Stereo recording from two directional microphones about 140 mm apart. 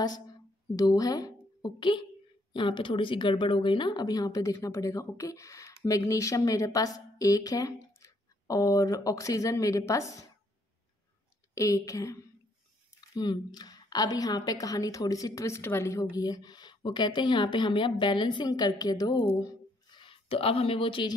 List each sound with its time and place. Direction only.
0.0 s a woman's voice: 30° left (ahead or behind)
11.5 s a woman's voice: 20° left (ahead or behind)
19.4 s a sound: 35° left (ahead or behind)